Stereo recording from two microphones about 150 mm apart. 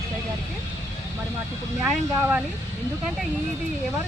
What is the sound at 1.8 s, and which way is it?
Speech, 10° right (ahead or behind).